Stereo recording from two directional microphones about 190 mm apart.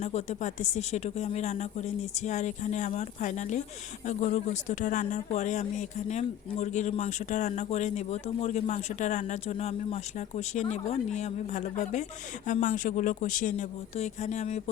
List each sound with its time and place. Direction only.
0.0 s speech: 35° left (ahead or behind)